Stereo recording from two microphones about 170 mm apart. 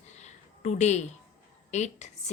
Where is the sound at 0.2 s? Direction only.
40° left (ahead or behind).